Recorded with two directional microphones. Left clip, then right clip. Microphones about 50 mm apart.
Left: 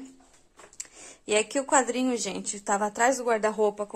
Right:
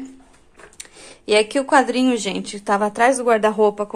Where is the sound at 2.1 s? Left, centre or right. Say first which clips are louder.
Right 8 dB; left.